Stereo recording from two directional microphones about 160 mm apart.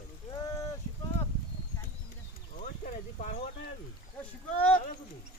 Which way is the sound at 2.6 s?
55° left (ahead or behind).